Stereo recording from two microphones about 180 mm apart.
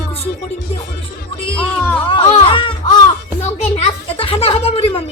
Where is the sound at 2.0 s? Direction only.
30° left (ahead or behind).